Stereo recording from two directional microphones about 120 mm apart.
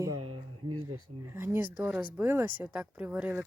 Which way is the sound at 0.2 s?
45° right (ahead or behind).